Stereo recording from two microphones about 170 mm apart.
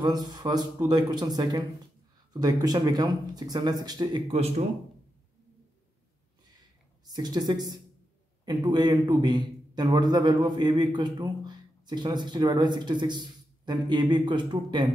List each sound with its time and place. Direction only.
0.0 s a man's voice: 25° right (ahead or behind)
7.1 s a man's voice: 25° right (ahead or behind)